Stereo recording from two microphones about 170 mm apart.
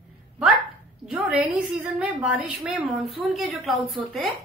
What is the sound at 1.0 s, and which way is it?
A woman's voice, centre (ahead or behind).